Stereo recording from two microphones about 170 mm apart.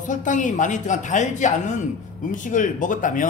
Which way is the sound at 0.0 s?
50° left (ahead or behind).